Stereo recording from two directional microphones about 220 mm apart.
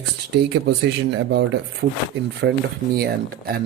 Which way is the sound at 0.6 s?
50° right (ahead or behind).